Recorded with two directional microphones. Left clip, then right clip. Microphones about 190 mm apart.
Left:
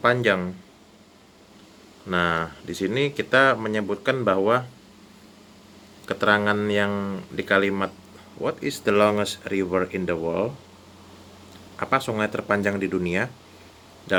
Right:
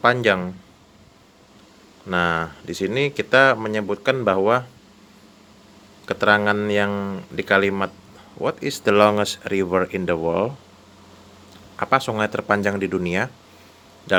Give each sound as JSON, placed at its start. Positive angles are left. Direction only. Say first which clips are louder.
{"t": 0.0, "sound": "speech", "louder": "right 3 dB", "side_deg": -30}
{"t": 2.0, "sound": "speech", "louder": "right 2 dB", "side_deg": -25}
{"t": 6.1, "sound": "speech", "louder": "right 3 dB", "side_deg": -25}
{"t": 11.8, "sound": "speech", "louder": "right 4 dB", "side_deg": -30}